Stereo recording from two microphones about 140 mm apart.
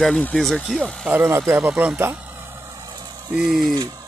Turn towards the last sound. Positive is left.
turn(degrees=-5)  # may be behind; listen again after turning